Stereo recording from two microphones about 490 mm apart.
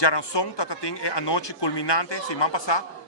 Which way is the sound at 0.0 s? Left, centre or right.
Left.